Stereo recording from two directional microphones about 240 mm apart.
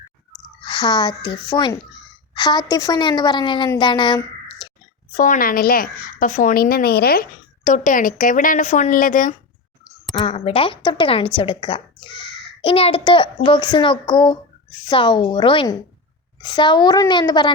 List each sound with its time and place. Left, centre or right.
0.6 s a child's voice: centre
5.1 s a woman's voice: left
10.2 s a child's voice: left